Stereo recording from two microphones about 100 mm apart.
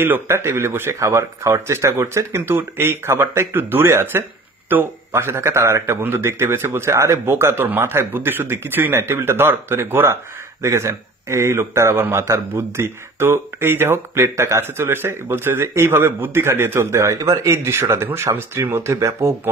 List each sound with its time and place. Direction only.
0.0 s a man's voice: 25° right (ahead or behind)